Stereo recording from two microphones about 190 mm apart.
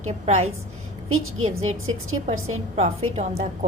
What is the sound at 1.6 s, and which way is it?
Speech, 90° right.